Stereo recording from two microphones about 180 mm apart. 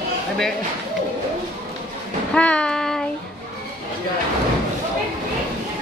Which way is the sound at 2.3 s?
5° left (ahead or behind).